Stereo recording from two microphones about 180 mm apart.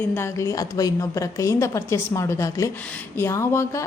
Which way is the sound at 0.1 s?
15° left (ahead or behind).